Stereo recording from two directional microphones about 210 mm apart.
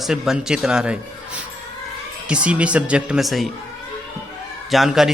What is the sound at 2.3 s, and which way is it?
Speech, 5° right (ahead or behind).